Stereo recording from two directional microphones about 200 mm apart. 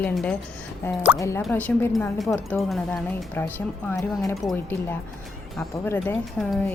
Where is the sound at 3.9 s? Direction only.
15° left (ahead or behind).